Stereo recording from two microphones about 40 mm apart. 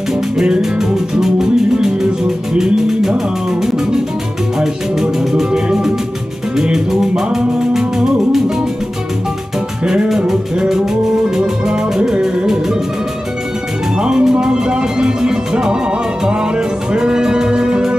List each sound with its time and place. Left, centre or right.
0.4 s music: centre
4.6 s music: centre
10.0 s music: centre
13.9 s music: right